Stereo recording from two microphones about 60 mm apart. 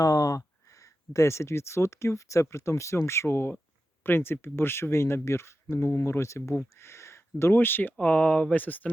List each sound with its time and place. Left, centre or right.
0.0 s speech: left
6.5 s speech: left
7.5 s speech: left
7.9 s speech: left